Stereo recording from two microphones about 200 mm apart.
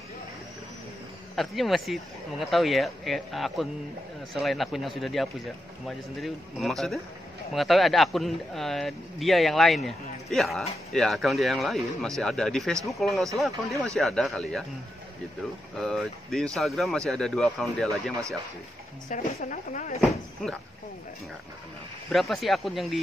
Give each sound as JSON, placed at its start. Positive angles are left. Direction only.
{"t": 1.3, "sound": "speech", "side_deg": 0}
{"t": 15.8, "sound": "speech", "side_deg": 0}
{"t": 19.0, "sound": "speech", "side_deg": 45}
{"t": 20.4, "sound": "speech", "side_deg": 0}
{"t": 22.1, "sound": "speech", "side_deg": 0}